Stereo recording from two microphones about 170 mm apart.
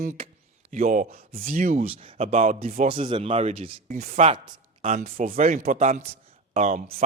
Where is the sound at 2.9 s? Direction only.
30° right (ahead or behind).